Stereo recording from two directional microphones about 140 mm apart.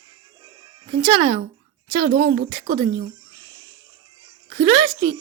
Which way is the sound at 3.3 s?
30° right (ahead or behind).